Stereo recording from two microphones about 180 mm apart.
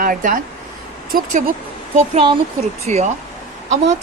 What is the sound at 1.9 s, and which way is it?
Speech, 40° right (ahead or behind).